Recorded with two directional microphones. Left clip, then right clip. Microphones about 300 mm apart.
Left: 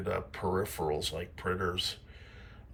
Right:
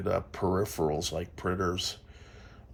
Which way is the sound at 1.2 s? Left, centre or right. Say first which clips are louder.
Right 2 dB; right.